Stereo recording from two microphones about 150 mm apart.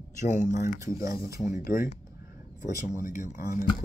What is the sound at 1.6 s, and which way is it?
Speech, 65° left (ahead or behind).